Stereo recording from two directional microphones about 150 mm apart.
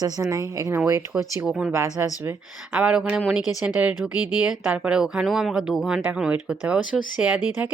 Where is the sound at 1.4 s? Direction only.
5° right (ahead or behind).